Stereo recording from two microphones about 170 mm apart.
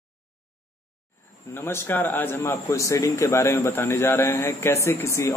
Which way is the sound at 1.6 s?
15° left (ahead or behind).